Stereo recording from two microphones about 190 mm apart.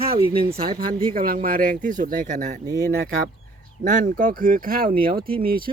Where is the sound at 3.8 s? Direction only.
40° right (ahead or behind).